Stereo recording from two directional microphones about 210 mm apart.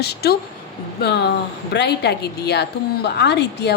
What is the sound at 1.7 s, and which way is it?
A woman's voice, 55° left (ahead or behind).